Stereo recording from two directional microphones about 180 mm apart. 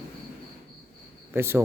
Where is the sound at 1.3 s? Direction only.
15° right (ahead or behind).